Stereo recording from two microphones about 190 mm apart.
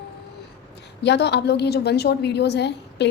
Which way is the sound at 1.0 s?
65° left (ahead or behind).